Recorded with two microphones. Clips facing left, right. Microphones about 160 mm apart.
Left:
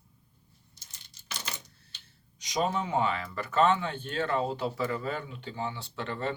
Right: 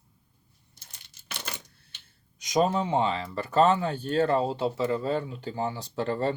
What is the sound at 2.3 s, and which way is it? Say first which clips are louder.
Speech: right 5 dB; 45° right (ahead or behind).